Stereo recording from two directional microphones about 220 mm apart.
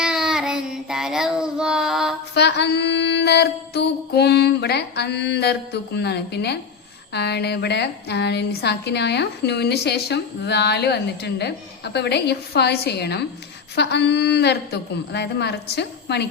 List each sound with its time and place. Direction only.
0.0 s child singing: 5° right (ahead or behind)
2.3 s a woman's voice: 50° left (ahead or behind)